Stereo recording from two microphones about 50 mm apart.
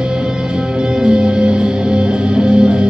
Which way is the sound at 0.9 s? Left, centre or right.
Centre.